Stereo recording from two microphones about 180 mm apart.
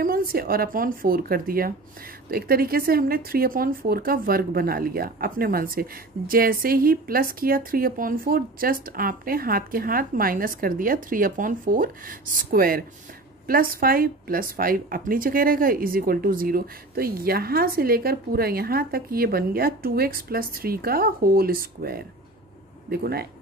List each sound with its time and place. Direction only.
0.0 s speech: 55° right (ahead or behind)